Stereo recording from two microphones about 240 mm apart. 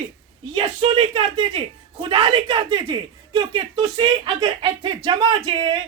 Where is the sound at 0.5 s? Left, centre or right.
Right.